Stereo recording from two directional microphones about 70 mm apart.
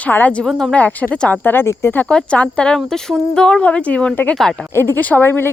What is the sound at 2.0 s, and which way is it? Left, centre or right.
Speech, centre.